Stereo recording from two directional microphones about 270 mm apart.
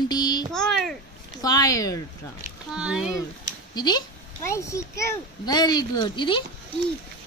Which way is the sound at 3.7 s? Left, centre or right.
Centre.